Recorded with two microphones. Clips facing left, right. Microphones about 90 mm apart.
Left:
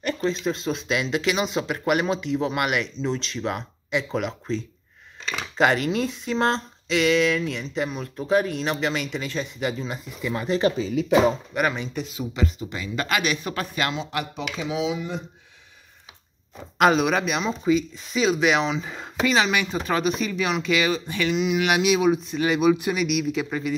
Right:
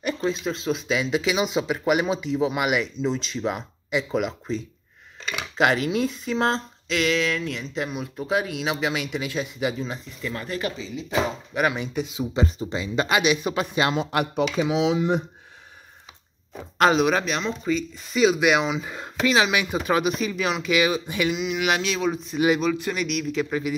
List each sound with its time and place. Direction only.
0.0 s speech: 5° right (ahead or behind)
5.6 s speech: centre (ahead or behind)
10.3 s speech: 20° left (ahead or behind)
11.5 s speech: 5° right (ahead or behind)
12.4 s speech: 35° right (ahead or behind)
13.9 s speech: 55° right (ahead or behind)
14.8 s speech: 75° right (ahead or behind)
16.7 s speech: centre (ahead or behind)